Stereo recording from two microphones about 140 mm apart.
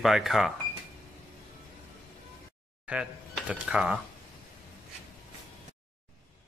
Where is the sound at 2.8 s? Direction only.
10° right (ahead or behind).